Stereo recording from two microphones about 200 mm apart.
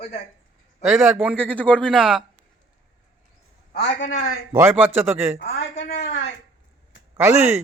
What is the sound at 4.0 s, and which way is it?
Speech, 40° left (ahead or behind).